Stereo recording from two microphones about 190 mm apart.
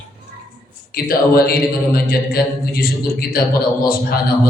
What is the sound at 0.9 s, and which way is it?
A man's voice, 50° left (ahead or behind).